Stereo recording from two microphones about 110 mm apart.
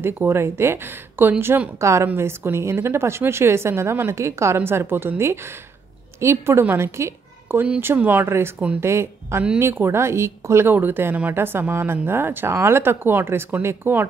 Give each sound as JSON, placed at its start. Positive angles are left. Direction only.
{"t": 0.0, "sound": "speech", "side_deg": -20}